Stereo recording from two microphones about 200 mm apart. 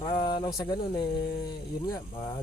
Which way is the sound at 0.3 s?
20° left (ahead or behind).